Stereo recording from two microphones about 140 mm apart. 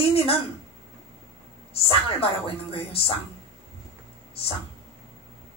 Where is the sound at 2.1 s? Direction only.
45° left (ahead or behind).